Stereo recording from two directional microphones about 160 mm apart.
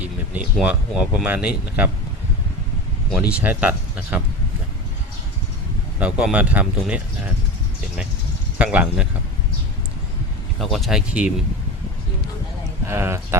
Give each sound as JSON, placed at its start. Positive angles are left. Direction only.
{"t": 0.0, "sound": "speech", "side_deg": -10}
{"t": 3.1, "sound": "speech", "side_deg": -5}
{"t": 6.0, "sound": "speech", "side_deg": -5}
{"t": 8.5, "sound": "speech", "side_deg": -10}
{"t": 10.6, "sound": "speech", "side_deg": 0}
{"t": 12.8, "sound": "speech", "side_deg": -15}